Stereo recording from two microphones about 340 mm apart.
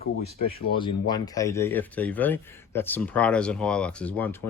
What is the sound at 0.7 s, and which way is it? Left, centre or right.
Speech, centre.